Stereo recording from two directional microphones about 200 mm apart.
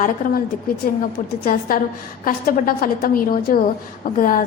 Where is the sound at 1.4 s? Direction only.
45° left (ahead or behind).